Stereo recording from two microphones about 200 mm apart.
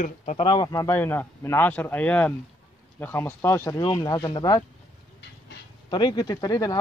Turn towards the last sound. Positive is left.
turn(degrees=20)  # may be behind; listen again after turning